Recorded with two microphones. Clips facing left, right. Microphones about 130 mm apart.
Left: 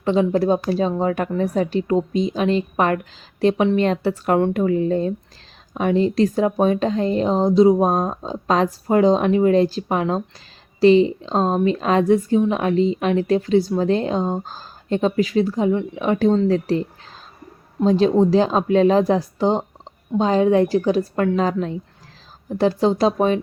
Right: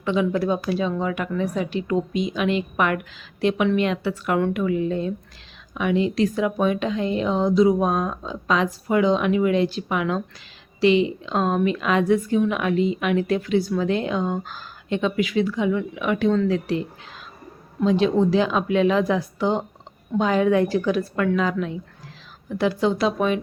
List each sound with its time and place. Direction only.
0.0 s speech: 35° left (ahead or behind)
17.8 s speech: 35° left (ahead or behind)